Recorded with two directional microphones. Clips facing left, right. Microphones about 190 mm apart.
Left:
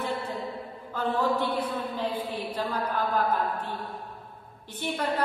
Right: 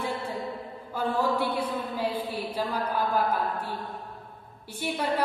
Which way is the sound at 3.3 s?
10° right (ahead or behind).